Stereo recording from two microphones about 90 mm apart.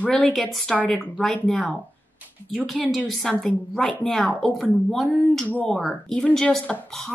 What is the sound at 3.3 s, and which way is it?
Speech, 10° left (ahead or behind).